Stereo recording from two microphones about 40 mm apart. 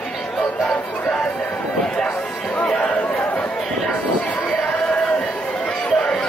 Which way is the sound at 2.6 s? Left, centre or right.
Left.